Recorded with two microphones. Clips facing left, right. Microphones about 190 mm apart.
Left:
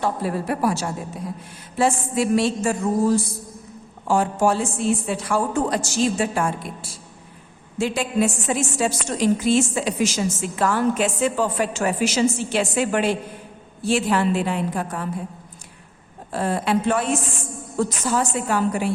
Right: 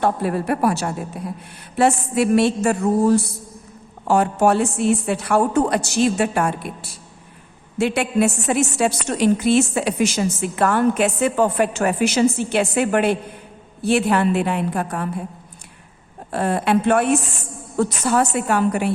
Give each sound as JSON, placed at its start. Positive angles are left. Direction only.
{"t": 0.0, "sound": "a woman's voice", "side_deg": -60}
{"t": 16.3, "sound": "a woman's voice", "side_deg": -60}